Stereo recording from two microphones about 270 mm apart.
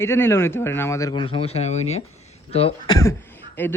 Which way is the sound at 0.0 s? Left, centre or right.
Centre.